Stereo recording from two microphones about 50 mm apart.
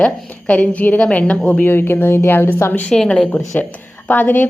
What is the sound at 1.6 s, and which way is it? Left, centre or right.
Speech, left.